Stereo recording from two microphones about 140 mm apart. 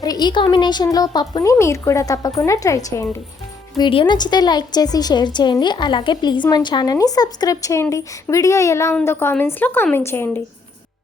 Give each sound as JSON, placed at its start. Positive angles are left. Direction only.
{"t": 0.0, "sound": "speech", "side_deg": 30}
{"t": 3.8, "sound": "a woman's voice", "side_deg": 35}